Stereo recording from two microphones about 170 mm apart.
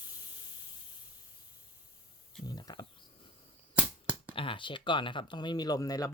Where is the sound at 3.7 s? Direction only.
10° right (ahead or behind).